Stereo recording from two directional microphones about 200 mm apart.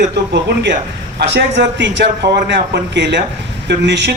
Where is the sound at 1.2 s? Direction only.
60° right (ahead or behind).